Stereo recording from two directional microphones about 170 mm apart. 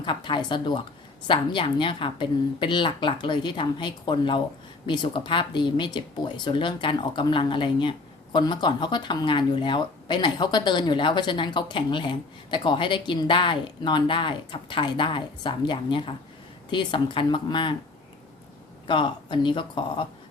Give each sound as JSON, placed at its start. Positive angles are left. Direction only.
{"t": 0.0, "sound": "speech", "side_deg": 30}
{"t": 18.9, "sound": "speech", "side_deg": 25}